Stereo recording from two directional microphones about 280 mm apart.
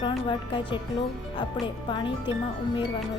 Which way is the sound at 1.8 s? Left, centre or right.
Centre.